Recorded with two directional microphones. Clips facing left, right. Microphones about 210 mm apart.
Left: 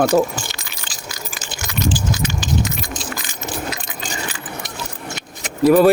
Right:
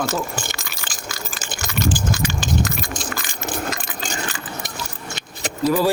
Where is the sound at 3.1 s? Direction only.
5° left (ahead or behind).